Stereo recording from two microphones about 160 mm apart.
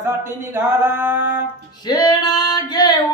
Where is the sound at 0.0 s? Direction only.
15° right (ahead or behind).